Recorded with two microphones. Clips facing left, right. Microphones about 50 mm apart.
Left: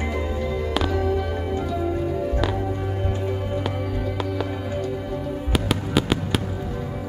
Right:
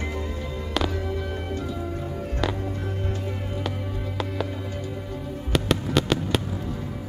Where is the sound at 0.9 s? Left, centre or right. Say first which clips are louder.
Left 6 dB; left.